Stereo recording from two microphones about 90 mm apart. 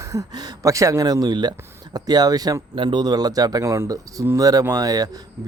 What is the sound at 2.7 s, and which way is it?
Speech, 60° right (ahead or behind).